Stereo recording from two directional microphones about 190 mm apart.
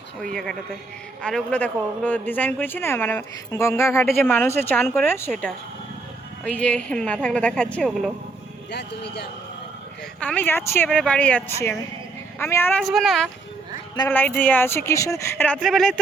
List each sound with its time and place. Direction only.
0.2 s a woman's voice: centre (ahead or behind)
8.7 s speech: 60° left (ahead or behind)
10.2 s speech: 10° left (ahead or behind)
12.8 s a woman's voice: centre (ahead or behind)